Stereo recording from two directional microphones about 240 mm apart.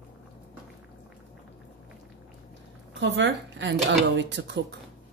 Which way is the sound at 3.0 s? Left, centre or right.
Right.